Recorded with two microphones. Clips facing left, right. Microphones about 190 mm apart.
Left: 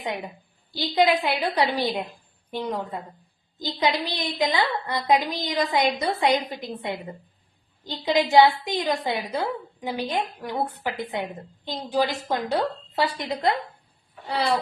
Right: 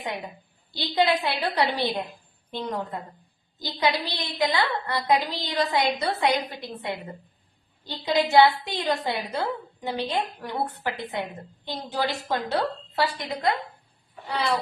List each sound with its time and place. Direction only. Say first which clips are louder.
0.7 s a woman's voice: left 2 dB; 15° left (ahead or behind)